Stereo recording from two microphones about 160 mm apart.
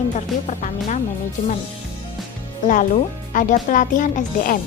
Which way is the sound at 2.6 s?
55° left (ahead or behind).